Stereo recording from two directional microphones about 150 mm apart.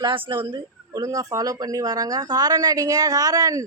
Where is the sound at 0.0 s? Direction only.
35° right (ahead or behind).